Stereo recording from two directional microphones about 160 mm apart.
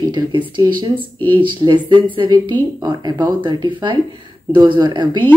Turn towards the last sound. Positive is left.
turn(degrees=-30)  # may be behind; listen again after turning